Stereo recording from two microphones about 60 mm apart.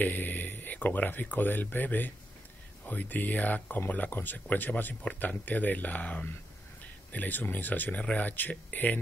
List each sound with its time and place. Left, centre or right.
0.0 s speech: left